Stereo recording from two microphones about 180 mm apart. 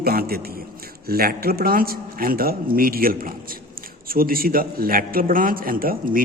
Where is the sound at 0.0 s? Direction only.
55° right (ahead or behind).